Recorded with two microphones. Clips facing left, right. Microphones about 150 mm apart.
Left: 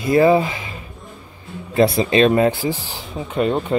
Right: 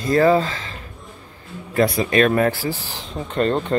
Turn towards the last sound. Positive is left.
turn(degrees=10)  # may be behind; listen again after turning